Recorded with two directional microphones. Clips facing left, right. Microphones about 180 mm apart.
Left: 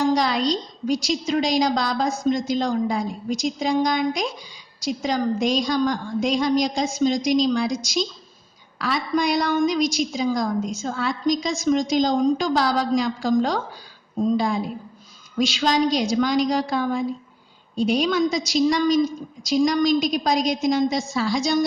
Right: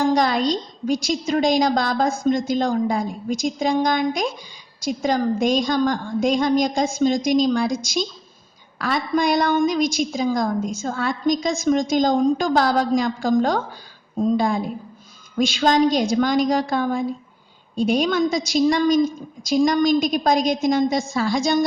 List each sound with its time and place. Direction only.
0.0 s a woman's voice: 50° right (ahead or behind)